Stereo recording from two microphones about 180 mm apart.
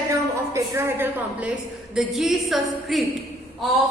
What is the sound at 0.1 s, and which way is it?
A woman's voice, 15° right (ahead or behind).